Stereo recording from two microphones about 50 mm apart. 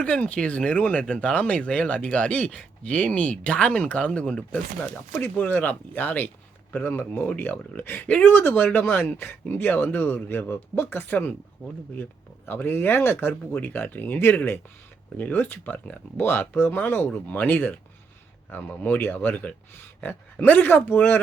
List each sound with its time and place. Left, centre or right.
0.0 s speech: left
5.4 s a man's voice: left
9.1 s a man's voice: left
12.5 s a man's voice: left